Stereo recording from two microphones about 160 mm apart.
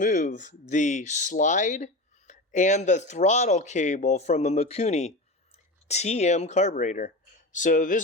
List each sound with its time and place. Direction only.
0.0 s speech: 55° left (ahead or behind)